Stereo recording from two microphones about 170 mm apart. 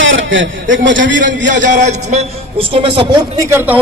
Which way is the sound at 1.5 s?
45° right (ahead or behind).